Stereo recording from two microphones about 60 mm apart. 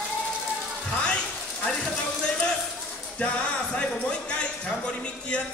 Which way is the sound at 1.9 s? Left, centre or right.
Centre.